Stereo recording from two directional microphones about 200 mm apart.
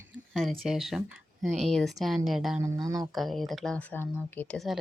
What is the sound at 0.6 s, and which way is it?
Speech, centre (ahead or behind).